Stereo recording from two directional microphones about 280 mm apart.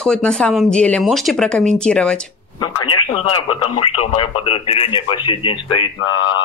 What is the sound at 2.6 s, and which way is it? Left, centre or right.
Speech, centre.